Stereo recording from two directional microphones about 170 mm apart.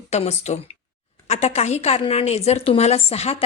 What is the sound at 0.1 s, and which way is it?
A woman's voice, 40° left (ahead or behind).